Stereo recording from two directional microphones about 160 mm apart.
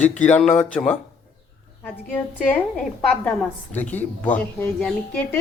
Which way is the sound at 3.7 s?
10° left (ahead or behind).